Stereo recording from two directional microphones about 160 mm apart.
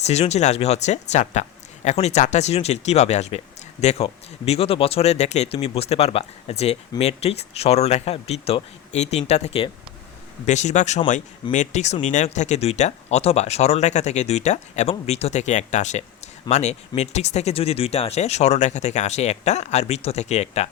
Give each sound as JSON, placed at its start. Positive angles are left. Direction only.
{"t": 0.0, "sound": "speech", "side_deg": 45}